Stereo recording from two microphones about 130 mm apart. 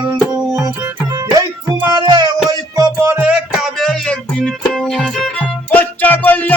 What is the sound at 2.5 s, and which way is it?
Music, 30° right (ahead or behind).